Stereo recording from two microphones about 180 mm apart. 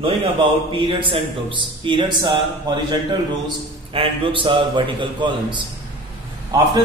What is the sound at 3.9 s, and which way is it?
A man's voice, 30° right (ahead or behind).